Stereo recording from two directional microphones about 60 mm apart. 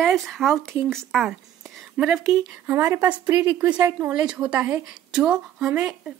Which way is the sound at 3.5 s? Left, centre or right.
Right.